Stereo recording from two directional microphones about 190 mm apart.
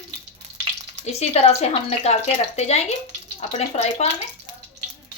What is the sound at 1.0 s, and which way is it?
Speech, 35° left (ahead or behind).